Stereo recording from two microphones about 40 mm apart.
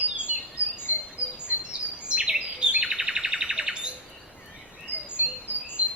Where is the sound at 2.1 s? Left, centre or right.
Right.